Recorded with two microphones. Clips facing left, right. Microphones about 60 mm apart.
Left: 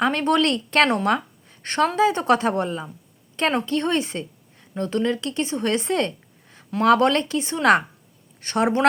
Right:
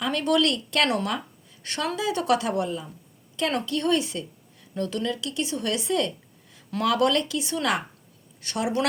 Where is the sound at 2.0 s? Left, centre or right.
Left.